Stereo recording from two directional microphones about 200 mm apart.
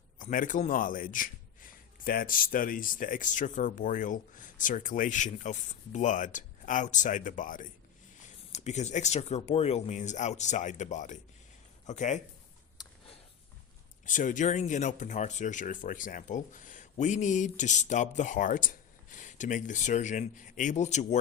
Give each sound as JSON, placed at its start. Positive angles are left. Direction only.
{"t": 0.2, "sound": "a man's voice", "side_deg": 40}
{"t": 12.7, "sound": "a sound", "side_deg": 20}
{"t": 14.0, "sound": "a man's voice", "side_deg": 40}